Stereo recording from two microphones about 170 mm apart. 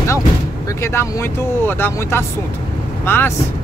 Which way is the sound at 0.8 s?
15° left (ahead or behind).